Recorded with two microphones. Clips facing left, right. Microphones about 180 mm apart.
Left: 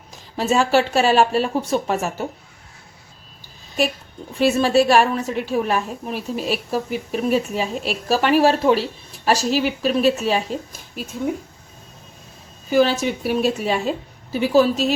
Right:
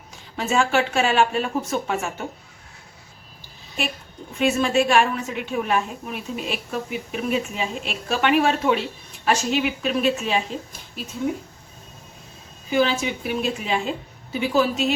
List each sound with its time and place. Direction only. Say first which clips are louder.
0.3 s a woman's voice: left 4 dB; 35° left (ahead or behind)
4.4 s a woman's voice: left 4 dB; 35° left (ahead or behind)
12.7 s a woman's voice: left 4 dB; 40° left (ahead or behind)